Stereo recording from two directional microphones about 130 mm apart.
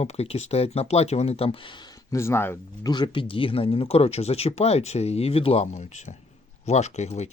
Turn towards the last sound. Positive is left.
turn(degrees=55)  # may be behind; listen again after turning